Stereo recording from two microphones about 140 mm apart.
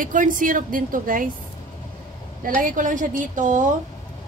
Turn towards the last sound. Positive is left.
turn(degrees=-65)  # may be behind; listen again after turning